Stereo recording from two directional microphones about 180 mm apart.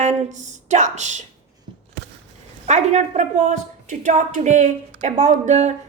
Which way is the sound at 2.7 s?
40° right (ahead or behind).